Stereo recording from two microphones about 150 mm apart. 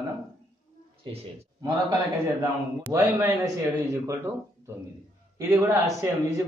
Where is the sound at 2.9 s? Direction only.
15° right (ahead or behind).